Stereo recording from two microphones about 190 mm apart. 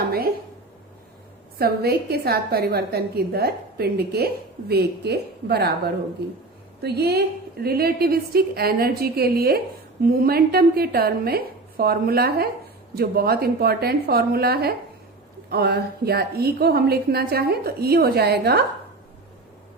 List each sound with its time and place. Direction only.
1.5 s a woman's voice: 55° right (ahead or behind)